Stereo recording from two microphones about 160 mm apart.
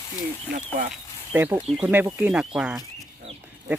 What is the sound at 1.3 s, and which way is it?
Speech, 10° right (ahead or behind).